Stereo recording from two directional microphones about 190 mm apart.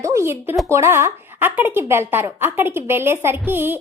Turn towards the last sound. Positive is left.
turn(degrees=-10)  # may be behind; listen again after turning